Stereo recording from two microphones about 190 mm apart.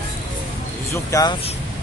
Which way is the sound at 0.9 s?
20° left (ahead or behind).